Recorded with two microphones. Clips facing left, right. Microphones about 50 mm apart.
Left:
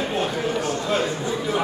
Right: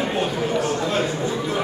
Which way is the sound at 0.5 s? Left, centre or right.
Centre.